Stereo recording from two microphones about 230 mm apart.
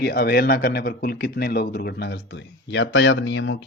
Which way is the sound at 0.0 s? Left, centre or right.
Left.